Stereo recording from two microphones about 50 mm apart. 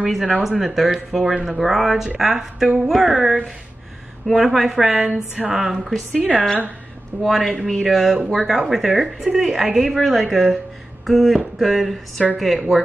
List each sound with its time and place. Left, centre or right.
0.4 s a woman's voice: centre
4.4 s a woman's voice: centre
6.1 s speech: left
7.2 s a woman's voice: centre